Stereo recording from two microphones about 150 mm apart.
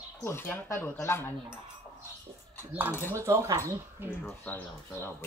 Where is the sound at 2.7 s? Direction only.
10° right (ahead or behind).